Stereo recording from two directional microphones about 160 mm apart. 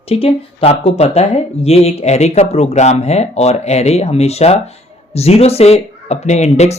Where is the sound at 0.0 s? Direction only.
35° left (ahead or behind).